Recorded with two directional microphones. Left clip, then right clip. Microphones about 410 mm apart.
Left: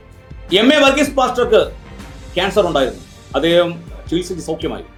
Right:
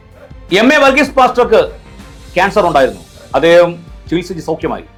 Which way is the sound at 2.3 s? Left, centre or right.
Centre.